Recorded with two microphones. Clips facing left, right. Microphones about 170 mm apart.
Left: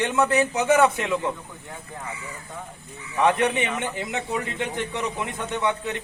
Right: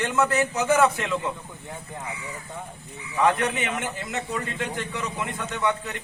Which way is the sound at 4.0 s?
20° left (ahead or behind).